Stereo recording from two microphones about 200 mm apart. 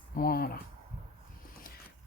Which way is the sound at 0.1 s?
50° left (ahead or behind).